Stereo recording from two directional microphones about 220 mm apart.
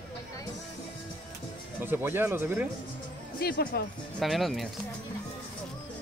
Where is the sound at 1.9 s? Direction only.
10° right (ahead or behind).